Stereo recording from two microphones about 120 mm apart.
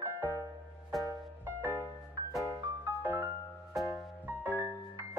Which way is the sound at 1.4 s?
15° right (ahead or behind).